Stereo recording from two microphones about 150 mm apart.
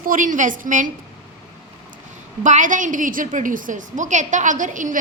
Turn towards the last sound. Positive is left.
turn(degrees=-60)  # may be behind; listen again after turning